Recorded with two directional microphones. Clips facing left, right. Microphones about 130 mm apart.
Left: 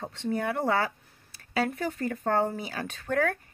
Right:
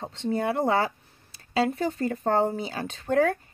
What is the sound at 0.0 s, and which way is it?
Speech, 20° right (ahead or behind).